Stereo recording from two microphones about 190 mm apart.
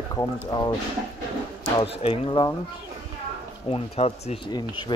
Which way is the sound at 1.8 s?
30° left (ahead or behind).